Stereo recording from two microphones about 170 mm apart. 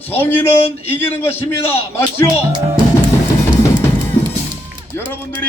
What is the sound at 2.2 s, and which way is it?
Speech, 25° right (ahead or behind).